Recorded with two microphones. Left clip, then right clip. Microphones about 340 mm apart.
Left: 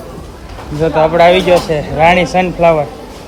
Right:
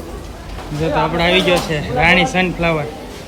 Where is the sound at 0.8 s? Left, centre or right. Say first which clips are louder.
Left 8 dB; centre.